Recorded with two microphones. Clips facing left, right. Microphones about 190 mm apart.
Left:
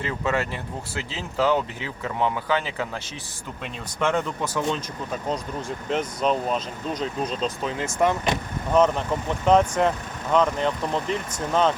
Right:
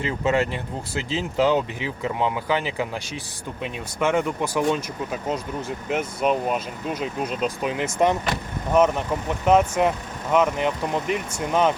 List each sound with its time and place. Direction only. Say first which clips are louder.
0.0 s speech: right 3 dB; 20° right (ahead or behind)
9.5 s speech: right 1 dB; 10° right (ahead or behind)